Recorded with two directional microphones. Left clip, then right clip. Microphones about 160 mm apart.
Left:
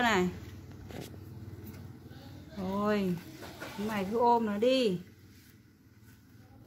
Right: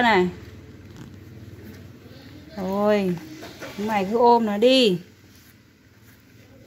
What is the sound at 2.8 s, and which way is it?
A woman's voice, 30° right (ahead or behind).